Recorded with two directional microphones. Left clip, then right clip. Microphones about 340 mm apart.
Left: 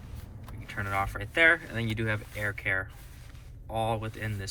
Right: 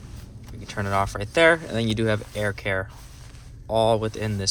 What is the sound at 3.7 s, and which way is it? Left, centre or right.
Speech, centre.